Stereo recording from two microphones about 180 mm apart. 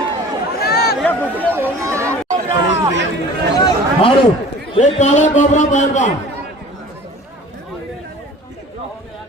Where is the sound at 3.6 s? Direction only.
30° left (ahead or behind).